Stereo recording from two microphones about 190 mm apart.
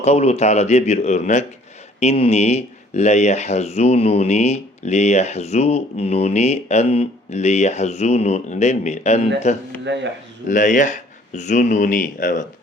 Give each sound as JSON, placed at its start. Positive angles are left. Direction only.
{"t": 0.0, "sound": "speech", "side_deg": 35}
{"t": 9.8, "sound": "speech", "side_deg": -70}
{"t": 10.5, "sound": "speech", "side_deg": 40}